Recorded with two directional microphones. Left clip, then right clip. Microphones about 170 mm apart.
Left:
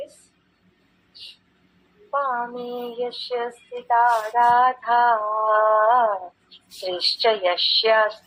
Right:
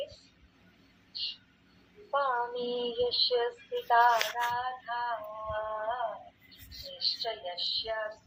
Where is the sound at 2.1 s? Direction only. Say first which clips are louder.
Left 6 dB; centre (ahead or behind).